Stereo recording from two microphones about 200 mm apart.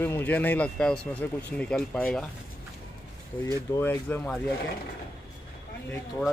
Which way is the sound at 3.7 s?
10° left (ahead or behind).